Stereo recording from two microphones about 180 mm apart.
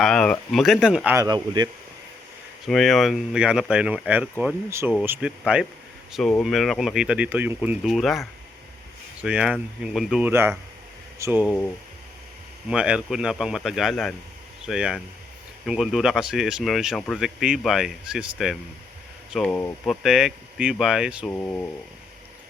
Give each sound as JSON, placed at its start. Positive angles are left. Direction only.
{"t": 0.0, "sound": "speech", "side_deg": 5}
{"t": 1.1, "sound": "speech", "side_deg": -20}
{"t": 2.6, "sound": "speech", "side_deg": 0}
{"t": 9.2, "sound": "speech", "side_deg": -5}
{"t": 12.6, "sound": "speech", "side_deg": -5}
{"t": 19.3, "sound": "speech", "side_deg": 5}
{"t": 19.9, "sound": "speech", "side_deg": 0}
{"t": 21.2, "sound": "speech", "side_deg": 10}